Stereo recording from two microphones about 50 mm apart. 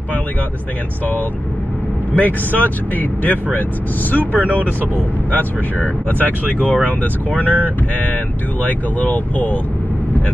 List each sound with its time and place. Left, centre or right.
2.1 s speech: left